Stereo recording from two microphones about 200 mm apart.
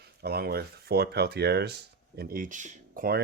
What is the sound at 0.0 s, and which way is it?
Speech, 50° right (ahead or behind).